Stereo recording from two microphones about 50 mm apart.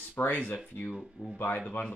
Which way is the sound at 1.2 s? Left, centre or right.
Right.